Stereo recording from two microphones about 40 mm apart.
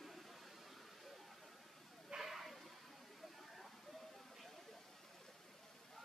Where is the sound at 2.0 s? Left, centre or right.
Centre.